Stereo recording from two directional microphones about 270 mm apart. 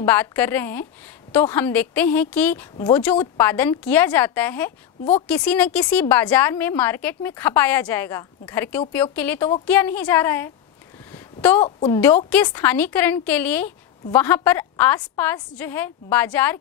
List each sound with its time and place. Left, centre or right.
0.0 s a woman's voice: centre
11.1 s a sound: centre
11.6 s a woman's voice: left
12.3 s a woman's voice: centre